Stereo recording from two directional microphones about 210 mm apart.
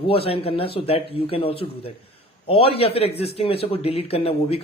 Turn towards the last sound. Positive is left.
turn(degrees=30)  # may be behind; listen again after turning